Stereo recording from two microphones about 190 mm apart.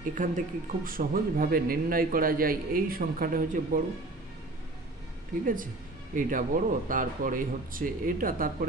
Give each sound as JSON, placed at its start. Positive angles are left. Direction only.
{"t": 0.1, "sound": "speech", "side_deg": -45}
{"t": 6.1, "sound": "speech", "side_deg": -45}